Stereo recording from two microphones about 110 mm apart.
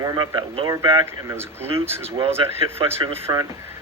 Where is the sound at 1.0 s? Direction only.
25° right (ahead or behind).